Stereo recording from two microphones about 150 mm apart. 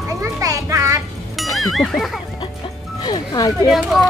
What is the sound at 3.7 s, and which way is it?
Speech, centre (ahead or behind).